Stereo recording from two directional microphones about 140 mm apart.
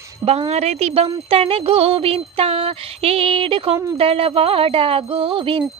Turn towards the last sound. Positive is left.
turn(degrees=-40)  # may be behind; listen again after turning